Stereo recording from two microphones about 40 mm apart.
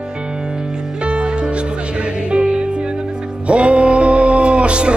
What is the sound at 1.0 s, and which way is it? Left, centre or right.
Music, right.